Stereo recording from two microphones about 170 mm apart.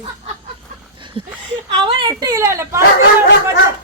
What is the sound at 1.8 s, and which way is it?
Speech, 25° right (ahead or behind).